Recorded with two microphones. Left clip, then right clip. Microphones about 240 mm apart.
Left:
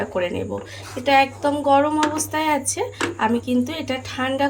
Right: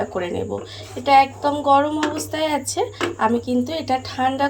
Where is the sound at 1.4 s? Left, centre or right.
Left.